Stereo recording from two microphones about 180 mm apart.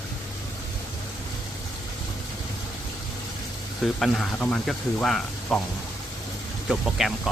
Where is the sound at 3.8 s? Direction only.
Centre (ahead or behind).